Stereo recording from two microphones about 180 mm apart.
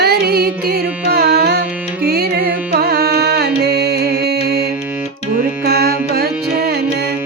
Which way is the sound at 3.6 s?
65° right (ahead or behind).